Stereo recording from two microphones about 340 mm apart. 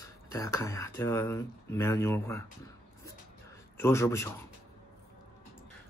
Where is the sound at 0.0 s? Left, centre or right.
Centre.